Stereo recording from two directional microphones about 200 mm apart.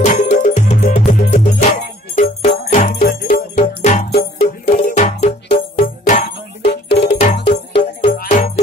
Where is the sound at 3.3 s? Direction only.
35° left (ahead or behind).